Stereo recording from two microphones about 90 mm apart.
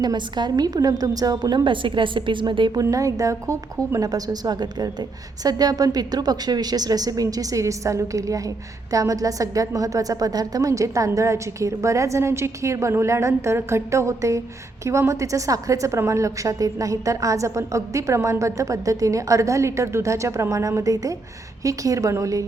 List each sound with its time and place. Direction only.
0.0 s a woman's voice: 50° right (ahead or behind)
2.8 s a woman's voice: 40° right (ahead or behind)